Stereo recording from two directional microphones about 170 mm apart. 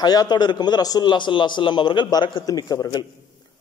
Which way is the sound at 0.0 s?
25° left (ahead or behind).